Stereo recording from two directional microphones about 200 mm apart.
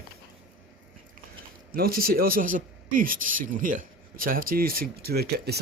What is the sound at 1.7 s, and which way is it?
Speech, 45° right (ahead or behind).